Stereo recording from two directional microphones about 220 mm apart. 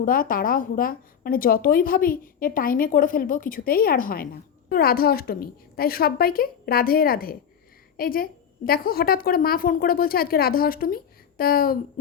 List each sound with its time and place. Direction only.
0.0 s a woman's voice: 40° left (ahead or behind)